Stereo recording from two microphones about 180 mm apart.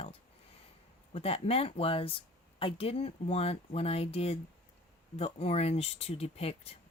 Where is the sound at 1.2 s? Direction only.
35° left (ahead or behind).